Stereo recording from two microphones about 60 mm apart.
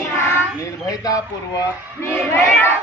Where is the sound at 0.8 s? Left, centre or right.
Left.